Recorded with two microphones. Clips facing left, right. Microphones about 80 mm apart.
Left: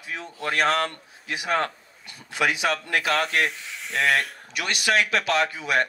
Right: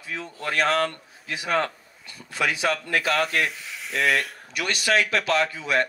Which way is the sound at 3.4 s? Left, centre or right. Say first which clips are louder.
Left 1 dB; centre.